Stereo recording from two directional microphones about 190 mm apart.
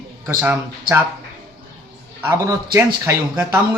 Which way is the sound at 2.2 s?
15° right (ahead or behind).